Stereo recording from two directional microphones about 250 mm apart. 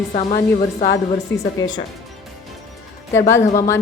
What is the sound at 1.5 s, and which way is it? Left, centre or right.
Speech, centre.